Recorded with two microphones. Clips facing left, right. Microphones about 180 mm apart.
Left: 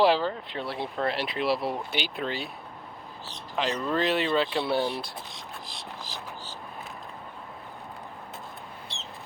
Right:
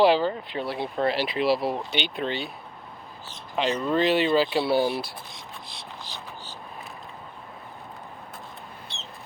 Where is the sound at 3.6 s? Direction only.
Centre (ahead or behind).